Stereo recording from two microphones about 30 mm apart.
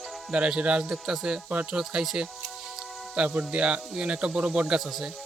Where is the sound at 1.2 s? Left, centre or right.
Right.